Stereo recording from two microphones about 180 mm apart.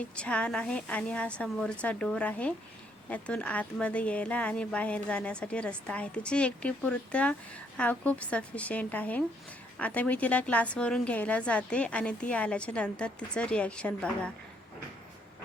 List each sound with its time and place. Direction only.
0.0 s a woman's voice: 5° left (ahead or behind)